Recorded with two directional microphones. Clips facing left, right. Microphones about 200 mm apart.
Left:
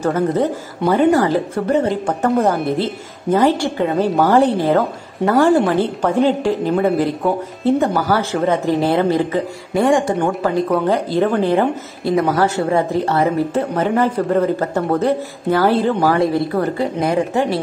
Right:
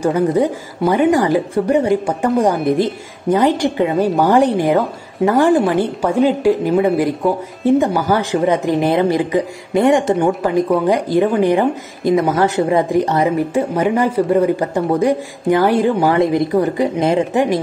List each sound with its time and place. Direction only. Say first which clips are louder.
0.0 s speech: right 2 dB; 15° right (ahead or behind)